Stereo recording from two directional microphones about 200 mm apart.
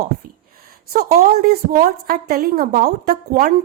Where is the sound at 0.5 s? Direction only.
45° right (ahead or behind).